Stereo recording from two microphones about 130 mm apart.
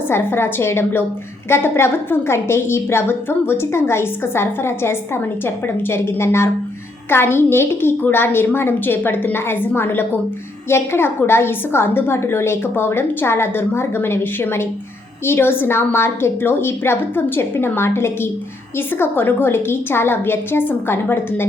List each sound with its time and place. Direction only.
0.1 s a woman's voice: 15° left (ahead or behind)